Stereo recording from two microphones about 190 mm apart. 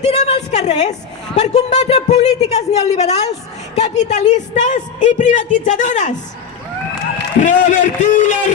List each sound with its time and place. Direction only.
0.0 s a sound: 35° left (ahead or behind)
1.4 s a man's voice: 35° left (ahead or behind)
7.3 s a man's voice: 40° left (ahead or behind)